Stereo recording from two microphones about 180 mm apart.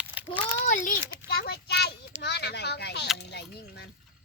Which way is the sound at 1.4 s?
65° left (ahead or behind).